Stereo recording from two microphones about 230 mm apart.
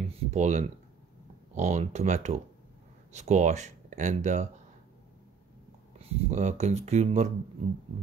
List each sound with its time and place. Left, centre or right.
0.1 s a sound: right
1.5 s speech: right
5.9 s speech: right